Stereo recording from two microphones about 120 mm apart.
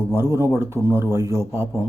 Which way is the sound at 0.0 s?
20° right (ahead or behind).